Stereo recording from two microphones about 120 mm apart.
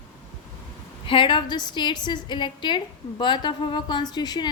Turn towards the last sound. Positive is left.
turn(degrees=35)  # may be behind; listen again after turning